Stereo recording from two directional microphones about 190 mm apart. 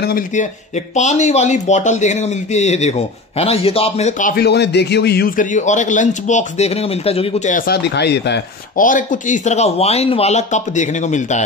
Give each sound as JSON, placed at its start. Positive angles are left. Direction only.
{"t": 0.9, "sound": "speech", "side_deg": 40}
{"t": 4.2, "sound": "a man's voice", "side_deg": 50}
{"t": 8.8, "sound": "speech", "side_deg": 45}